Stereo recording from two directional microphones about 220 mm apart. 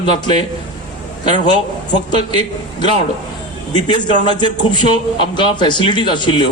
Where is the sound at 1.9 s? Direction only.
20° left (ahead or behind).